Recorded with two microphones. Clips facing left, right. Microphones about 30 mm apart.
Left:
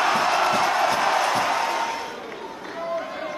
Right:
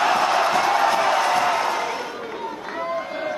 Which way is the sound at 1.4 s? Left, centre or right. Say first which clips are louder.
Right 2 dB; centre.